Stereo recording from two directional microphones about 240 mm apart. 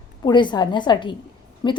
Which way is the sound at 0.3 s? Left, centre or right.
Centre.